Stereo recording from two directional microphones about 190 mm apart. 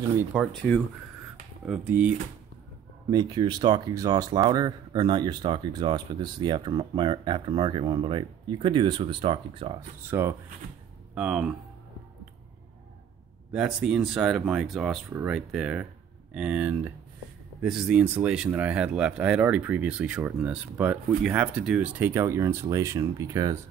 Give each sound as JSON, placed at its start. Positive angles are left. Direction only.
{"t": 0.3, "sound": "speech", "side_deg": 0}
{"t": 1.7, "sound": "speech", "side_deg": -10}
{"t": 3.1, "sound": "speech", "side_deg": -20}
{"t": 9.8, "sound": "speech", "side_deg": -15}
{"t": 13.5, "sound": "speech", "side_deg": -5}